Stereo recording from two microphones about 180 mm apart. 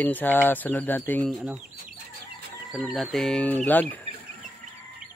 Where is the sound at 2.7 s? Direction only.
Centre (ahead or behind).